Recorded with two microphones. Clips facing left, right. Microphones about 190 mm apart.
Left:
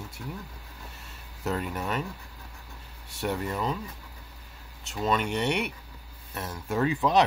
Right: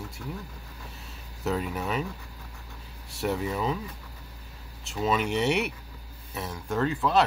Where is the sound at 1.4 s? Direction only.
Centre (ahead or behind).